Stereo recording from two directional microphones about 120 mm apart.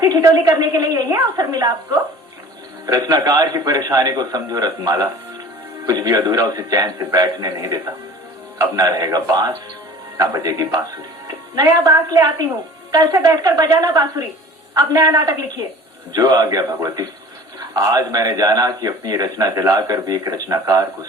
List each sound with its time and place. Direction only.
0.0 s a man's voice: 30° right (ahead or behind)
2.8 s a man's voice: 30° right (ahead or behind)
8.5 s a man's voice: 30° right (ahead or behind)